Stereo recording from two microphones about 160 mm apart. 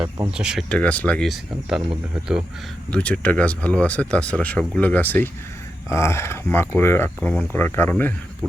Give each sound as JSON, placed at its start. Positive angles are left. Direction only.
{"t": 0.3, "sound": "speech", "side_deg": -5}
{"t": 0.8, "sound": "speech", "side_deg": 10}
{"t": 2.9, "sound": "speech", "side_deg": 10}